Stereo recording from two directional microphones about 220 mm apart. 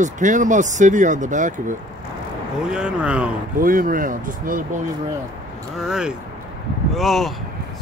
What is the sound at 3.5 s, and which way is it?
Speech, 40° right (ahead or behind).